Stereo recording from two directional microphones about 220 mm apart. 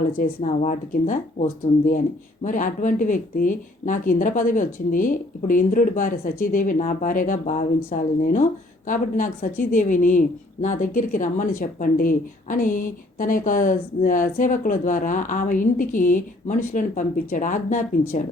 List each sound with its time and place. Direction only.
0.3 s a woman's voice: 35° left (ahead or behind)